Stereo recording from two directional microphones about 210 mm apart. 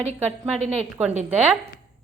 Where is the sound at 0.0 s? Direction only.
30° right (ahead or behind).